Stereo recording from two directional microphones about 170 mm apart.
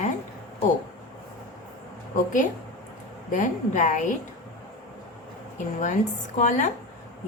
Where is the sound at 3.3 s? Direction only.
50° left (ahead or behind).